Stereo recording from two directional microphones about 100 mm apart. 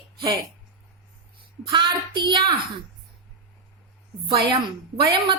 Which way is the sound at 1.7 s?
50° right (ahead or behind).